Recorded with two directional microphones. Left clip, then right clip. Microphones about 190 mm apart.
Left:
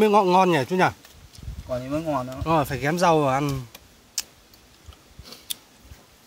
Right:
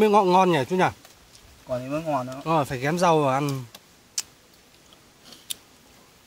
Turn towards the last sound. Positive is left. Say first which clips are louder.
# left 1 dB
turn(degrees=0)  # may be behind; listen again after turning